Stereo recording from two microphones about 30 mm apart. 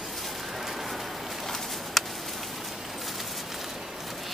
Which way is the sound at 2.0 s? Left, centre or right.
Centre.